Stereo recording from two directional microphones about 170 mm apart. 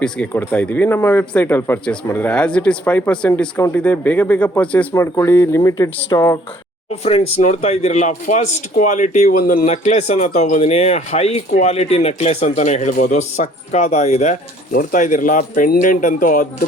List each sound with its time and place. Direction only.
0.0 s speech: 5° left (ahead or behind)
7.0 s a man's voice: 40° left (ahead or behind)